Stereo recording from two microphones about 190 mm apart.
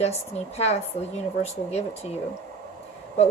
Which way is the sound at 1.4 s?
35° left (ahead or behind).